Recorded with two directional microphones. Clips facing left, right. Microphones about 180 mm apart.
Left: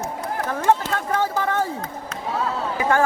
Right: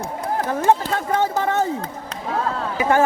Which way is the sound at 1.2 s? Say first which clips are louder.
Right 2 dB; 20° right (ahead or behind).